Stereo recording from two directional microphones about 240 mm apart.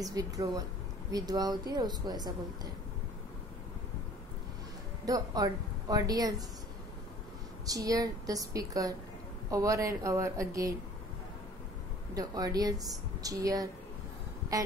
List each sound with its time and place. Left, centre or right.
0.0 s a woman's voice: centre
5.0 s a woman's voice: centre
7.6 s a woman's voice: centre
12.1 s a woman's voice: centre